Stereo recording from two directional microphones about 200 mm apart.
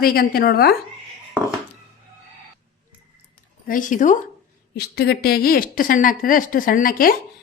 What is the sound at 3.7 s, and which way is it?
Speech, 40° left (ahead or behind).